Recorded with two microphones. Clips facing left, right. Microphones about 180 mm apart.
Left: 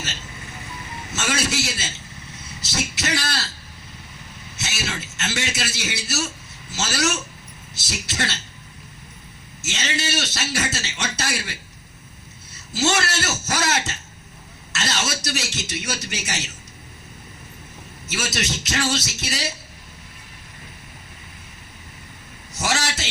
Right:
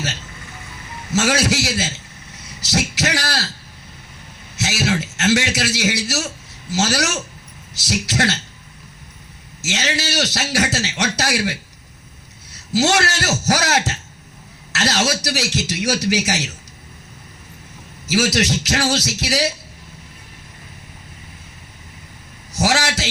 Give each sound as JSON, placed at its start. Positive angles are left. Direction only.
{"t": 1.2, "sound": "a man's voice", "side_deg": -70}
{"t": 4.6, "sound": "a man's voice", "side_deg": -70}
{"t": 9.6, "sound": "a man's voice", "side_deg": -70}
{"t": 12.5, "sound": "a man's voice", "side_deg": -70}
{"t": 18.0, "sound": "a man's voice", "side_deg": -70}
{"t": 22.5, "sound": "a man's voice", "side_deg": -70}